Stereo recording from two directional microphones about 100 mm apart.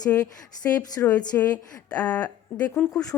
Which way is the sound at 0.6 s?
25° left (ahead or behind).